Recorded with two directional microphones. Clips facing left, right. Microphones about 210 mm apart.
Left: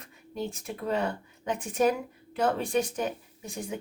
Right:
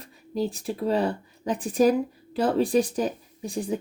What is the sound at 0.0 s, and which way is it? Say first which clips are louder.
Speech: right 7 dB; 35° right (ahead or behind).